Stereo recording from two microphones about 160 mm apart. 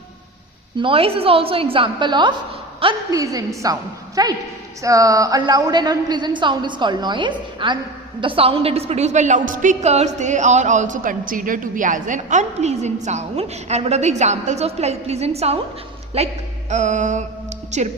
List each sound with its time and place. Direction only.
0.8 s a woman's voice: 35° right (ahead or behind)